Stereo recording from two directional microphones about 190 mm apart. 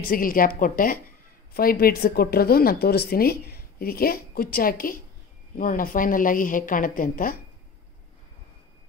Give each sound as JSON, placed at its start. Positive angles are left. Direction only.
{"t": 0.1, "sound": "a woman's voice", "side_deg": 50}